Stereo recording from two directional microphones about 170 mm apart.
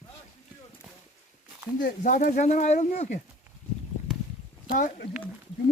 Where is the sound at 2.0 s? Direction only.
50° left (ahead or behind).